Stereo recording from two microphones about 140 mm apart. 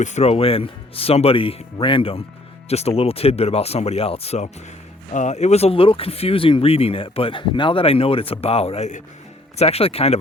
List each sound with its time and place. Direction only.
0.0 s speech: 55° left (ahead or behind)
9.6 s speech: 45° left (ahead or behind)